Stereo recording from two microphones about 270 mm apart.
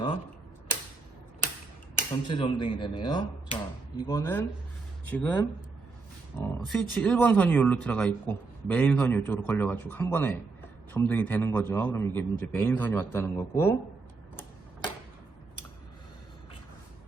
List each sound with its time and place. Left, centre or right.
2.0 s speech: centre